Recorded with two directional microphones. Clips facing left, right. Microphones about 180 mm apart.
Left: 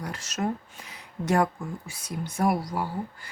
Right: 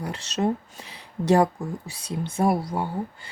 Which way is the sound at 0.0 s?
30° right (ahead or behind).